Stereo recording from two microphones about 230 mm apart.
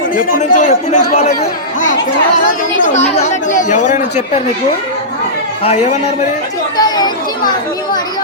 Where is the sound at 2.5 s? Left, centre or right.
Left.